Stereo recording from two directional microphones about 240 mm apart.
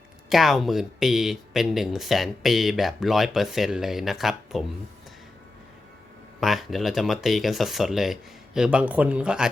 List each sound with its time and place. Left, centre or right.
0.3 s speech: centre
6.4 s speech: centre